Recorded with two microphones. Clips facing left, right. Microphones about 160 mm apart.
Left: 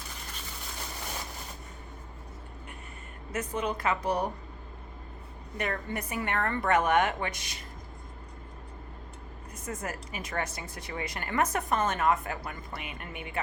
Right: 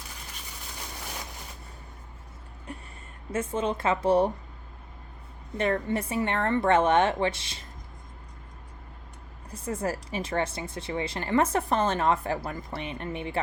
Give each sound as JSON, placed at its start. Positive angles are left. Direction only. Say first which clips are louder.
{"t": 3.3, "sound": "a woman's voice", "louder": "right 4 dB", "side_deg": -25}
{"t": 5.5, "sound": "a woman's voice", "louder": "right 7 dB", "side_deg": -25}
{"t": 9.5, "sound": "a woman's voice", "louder": "right 7 dB", "side_deg": -30}